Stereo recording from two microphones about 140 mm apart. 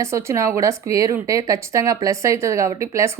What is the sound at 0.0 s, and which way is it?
Speech, 20° right (ahead or behind).